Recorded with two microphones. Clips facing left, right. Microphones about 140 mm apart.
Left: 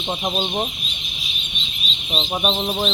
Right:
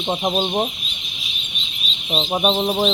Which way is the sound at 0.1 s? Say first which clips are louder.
Right 3 dB; 20° right (ahead or behind).